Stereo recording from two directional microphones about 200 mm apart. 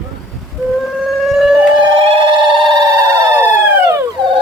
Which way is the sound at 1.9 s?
25° right (ahead or behind).